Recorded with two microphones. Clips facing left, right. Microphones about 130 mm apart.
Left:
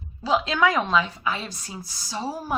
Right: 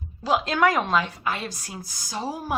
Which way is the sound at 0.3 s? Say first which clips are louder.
Even; 50° right (ahead or behind).